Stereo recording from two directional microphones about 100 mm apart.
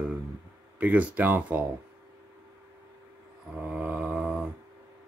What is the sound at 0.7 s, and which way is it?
Speech, 15° right (ahead or behind).